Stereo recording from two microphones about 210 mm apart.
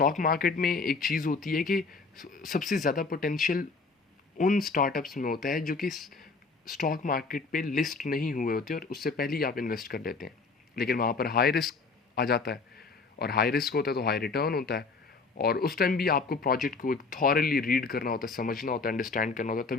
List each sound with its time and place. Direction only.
0.0 s speech: 40° left (ahead or behind)
5.9 s speech: centre (ahead or behind)
6.7 s a man's voice: 40° left (ahead or behind)